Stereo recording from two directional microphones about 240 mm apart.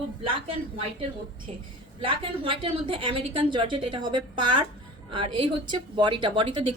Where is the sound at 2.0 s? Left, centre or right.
Right.